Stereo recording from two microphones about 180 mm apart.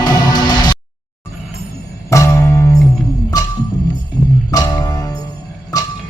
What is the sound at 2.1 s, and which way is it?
Music, 15° left (ahead or behind).